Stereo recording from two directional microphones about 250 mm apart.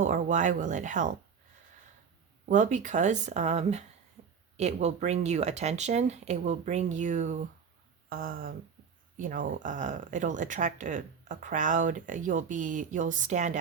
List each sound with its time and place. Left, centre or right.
0.0 s speech: right
2.5 s speech: right